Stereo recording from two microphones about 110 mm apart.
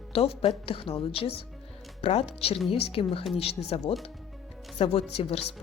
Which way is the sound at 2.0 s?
70° left (ahead or behind).